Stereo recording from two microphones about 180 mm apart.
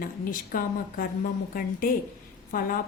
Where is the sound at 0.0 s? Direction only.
50° left (ahead or behind).